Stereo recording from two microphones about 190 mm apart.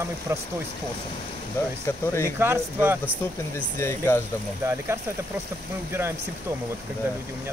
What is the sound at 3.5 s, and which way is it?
Speech, 15° left (ahead or behind).